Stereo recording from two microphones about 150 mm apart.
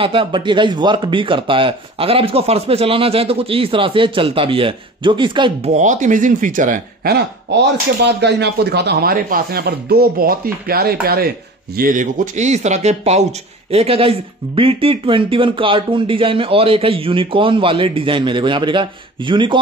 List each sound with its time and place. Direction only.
0.0 s speech: 35° right (ahead or behind)
5.7 s speech: 55° right (ahead or behind); by 7.2 s 90° right
8.4 s speech: 90° right; by 19.6 s 35° right (ahead or behind)